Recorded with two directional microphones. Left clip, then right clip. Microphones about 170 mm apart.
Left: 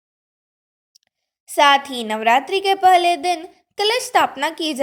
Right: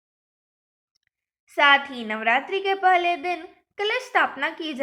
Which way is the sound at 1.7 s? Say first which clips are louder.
Left 3 dB; 55° left (ahead or behind).